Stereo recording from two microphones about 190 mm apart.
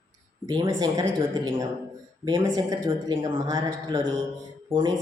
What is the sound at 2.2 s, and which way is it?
A woman's voice, 20° right (ahead or behind).